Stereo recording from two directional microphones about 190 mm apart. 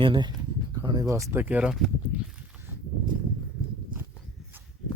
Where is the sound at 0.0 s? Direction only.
25° right (ahead or behind).